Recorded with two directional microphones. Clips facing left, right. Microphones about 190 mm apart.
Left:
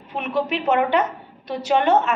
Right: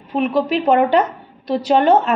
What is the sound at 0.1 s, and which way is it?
A woman's voice, 35° right (ahead or behind).